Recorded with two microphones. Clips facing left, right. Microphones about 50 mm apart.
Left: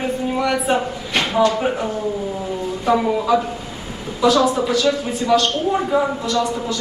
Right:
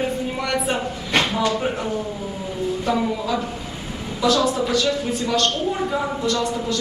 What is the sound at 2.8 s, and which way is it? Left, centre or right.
A woman's voice, centre.